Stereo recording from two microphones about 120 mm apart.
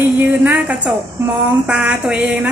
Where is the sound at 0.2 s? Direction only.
15° right (ahead or behind).